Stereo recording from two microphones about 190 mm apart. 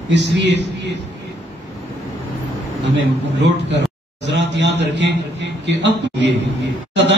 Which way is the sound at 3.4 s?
70° right (ahead or behind).